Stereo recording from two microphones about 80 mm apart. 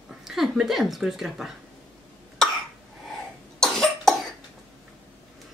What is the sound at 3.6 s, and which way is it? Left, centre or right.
Cough, centre.